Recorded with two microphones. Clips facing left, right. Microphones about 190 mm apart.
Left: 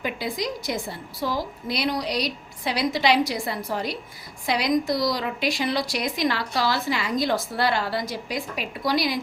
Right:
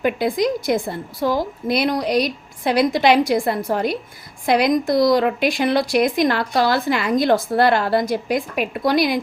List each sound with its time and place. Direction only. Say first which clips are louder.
0.0 s a woman's voice: right 9 dB; 55° right (ahead or behind)